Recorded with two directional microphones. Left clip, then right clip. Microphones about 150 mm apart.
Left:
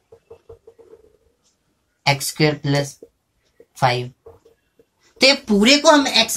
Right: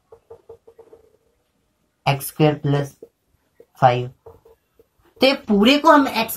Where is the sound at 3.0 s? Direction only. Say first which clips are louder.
Right 1 dB; 5° right (ahead or behind).